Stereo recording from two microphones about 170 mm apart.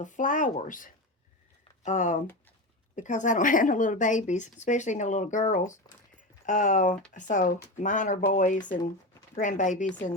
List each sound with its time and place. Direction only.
0.0 s a woman's voice: 50° left (ahead or behind)